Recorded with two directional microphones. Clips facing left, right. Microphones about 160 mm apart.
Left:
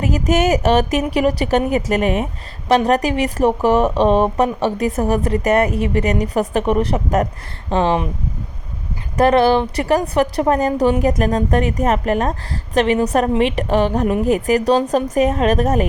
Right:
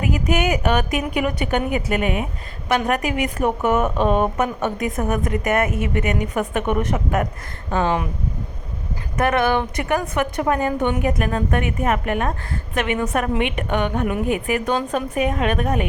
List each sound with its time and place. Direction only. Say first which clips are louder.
0.0 s a woman's voice: left 4 dB; 40° left (ahead or behind)
9.1 s a woman's voice: left 6 dB; 35° left (ahead or behind)